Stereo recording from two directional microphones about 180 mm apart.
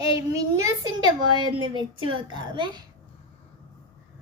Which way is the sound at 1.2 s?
25° right (ahead or behind).